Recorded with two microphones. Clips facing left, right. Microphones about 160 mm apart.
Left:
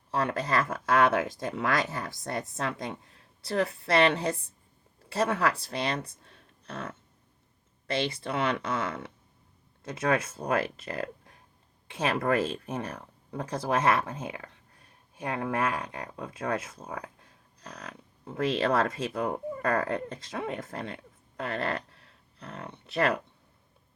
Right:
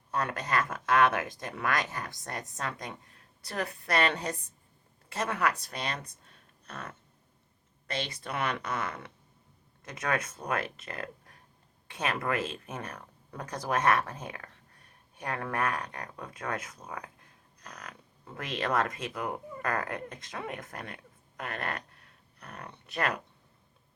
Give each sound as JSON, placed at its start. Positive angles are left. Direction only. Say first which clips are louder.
{"t": 0.1, "sound": "speech", "louder": "left 3 dB", "side_deg": 25}
{"t": 17.6, "sound": "livestock", "louder": "left 4 dB", "side_deg": 30}
{"t": 18.3, "sound": "speech", "louder": "left 5 dB", "side_deg": 30}